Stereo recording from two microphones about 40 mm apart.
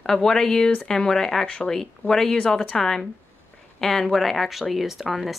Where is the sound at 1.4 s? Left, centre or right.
Left.